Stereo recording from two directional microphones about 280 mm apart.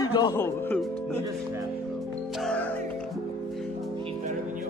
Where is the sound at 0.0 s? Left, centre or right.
Centre.